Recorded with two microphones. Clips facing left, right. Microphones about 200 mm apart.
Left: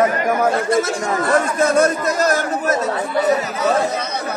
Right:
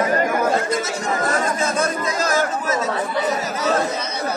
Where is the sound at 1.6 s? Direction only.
60° left (ahead or behind).